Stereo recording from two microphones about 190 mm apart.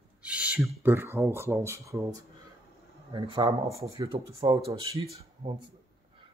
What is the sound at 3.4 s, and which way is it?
Speech, 20° right (ahead or behind).